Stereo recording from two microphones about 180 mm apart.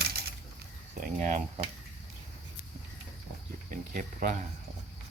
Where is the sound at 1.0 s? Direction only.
45° right (ahead or behind).